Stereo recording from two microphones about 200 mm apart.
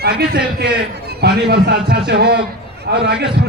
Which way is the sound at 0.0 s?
50° right (ahead or behind).